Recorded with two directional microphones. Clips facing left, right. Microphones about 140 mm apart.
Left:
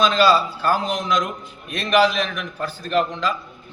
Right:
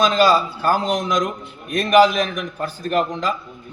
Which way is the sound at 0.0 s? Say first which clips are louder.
Right 1 dB; 40° right (ahead or behind).